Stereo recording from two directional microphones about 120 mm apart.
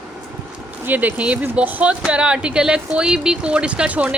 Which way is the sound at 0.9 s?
15° right (ahead or behind).